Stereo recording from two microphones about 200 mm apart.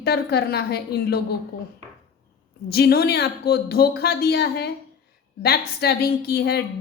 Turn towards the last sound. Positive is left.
turn(degrees=55)  # may be behind; listen again after turning